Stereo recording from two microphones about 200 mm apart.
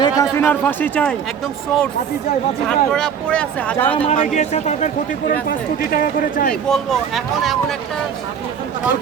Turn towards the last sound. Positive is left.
turn(degrees=0)  # may be behind; listen again after turning